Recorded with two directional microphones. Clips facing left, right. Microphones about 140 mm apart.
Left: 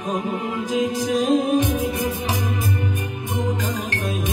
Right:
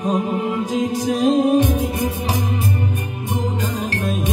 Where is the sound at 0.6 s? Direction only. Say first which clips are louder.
Right 1 dB; 35° right (ahead or behind).